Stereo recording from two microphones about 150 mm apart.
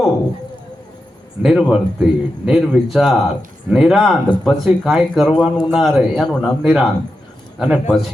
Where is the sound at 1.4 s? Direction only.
Centre (ahead or behind).